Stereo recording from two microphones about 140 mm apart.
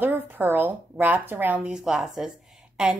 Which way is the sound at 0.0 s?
15° right (ahead or behind).